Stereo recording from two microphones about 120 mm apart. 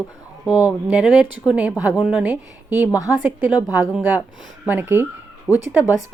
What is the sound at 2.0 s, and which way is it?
Speech, 10° right (ahead or behind).